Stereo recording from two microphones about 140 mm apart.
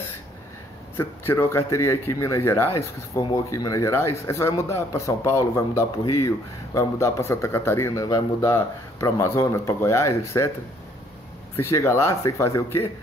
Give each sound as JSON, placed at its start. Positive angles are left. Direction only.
{"t": 0.9, "sound": "speech", "side_deg": 15}
{"t": 11.5, "sound": "speech", "side_deg": 20}